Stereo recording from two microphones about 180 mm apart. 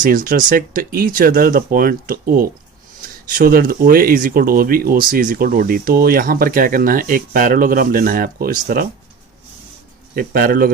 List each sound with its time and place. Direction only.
0.0 s speech: 50° right (ahead or behind)
10.2 s speech: 55° right (ahead or behind)